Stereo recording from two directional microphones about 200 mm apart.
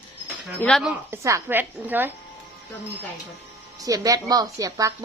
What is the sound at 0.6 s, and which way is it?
A woman's voice, centre (ahead or behind).